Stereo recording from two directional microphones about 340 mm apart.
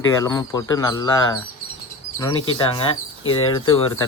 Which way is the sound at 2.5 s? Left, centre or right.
Centre.